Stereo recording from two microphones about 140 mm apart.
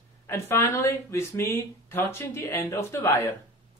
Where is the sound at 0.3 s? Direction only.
15° left (ahead or behind).